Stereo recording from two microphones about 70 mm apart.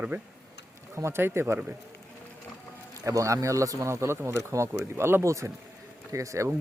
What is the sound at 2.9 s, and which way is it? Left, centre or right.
Speech, right.